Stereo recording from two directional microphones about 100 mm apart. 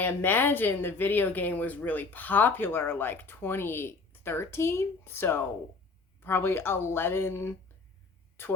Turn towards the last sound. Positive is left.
turn(degrees=25)  # may be behind; listen again after turning